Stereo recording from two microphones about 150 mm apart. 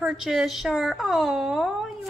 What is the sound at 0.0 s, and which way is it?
A woman's voice, 5° right (ahead or behind).